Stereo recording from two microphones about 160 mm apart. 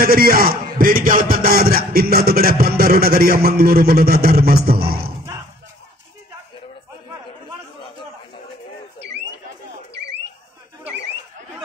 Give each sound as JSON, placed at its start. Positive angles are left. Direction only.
{"t": 0.0, "sound": "a man's voice", "side_deg": -65}